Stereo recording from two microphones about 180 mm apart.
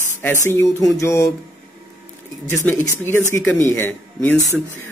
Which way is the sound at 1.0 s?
15° left (ahead or behind).